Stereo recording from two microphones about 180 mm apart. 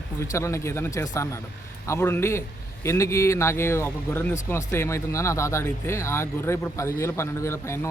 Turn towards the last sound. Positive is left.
turn(degrees=15)  # may be behind; listen again after turning